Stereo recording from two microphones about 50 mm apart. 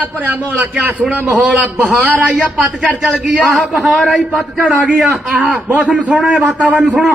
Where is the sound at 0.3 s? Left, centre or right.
Right.